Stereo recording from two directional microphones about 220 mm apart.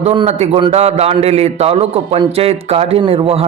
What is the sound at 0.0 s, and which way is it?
A man's voice, 30° right (ahead or behind).